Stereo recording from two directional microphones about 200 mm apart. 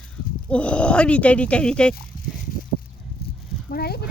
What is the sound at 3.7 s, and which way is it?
Speech, 50° left (ahead or behind).